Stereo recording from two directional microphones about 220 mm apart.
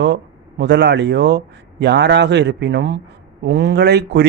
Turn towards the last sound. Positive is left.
turn(degrees=-50)  # may be behind; listen again after turning